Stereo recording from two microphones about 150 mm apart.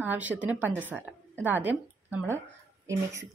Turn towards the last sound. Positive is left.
turn(degrees=-20)  # may be behind; listen again after turning